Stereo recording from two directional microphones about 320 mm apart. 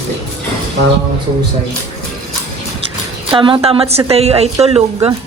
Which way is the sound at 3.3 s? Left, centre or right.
Centre.